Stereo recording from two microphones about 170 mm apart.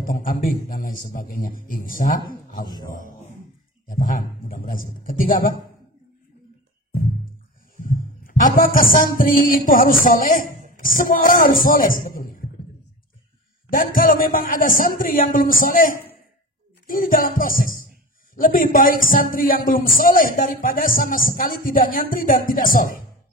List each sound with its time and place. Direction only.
0.0 s a man's voice: 55° left (ahead or behind)
2.6 s a man's voice: 25° left (ahead or behind)
2.9 s a man's voice: 50° left (ahead or behind)
7.7 s music: 55° left (ahead or behind)
13.7 s a man's voice: 55° left (ahead or behind)